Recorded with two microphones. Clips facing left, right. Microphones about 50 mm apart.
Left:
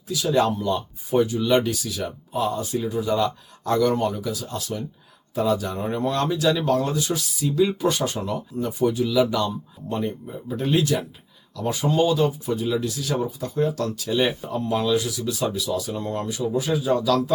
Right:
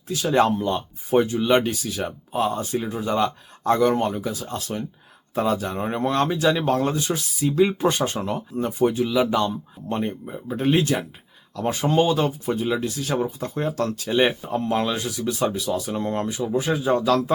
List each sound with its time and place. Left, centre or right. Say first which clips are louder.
0.1 s speech: right 2 dB; right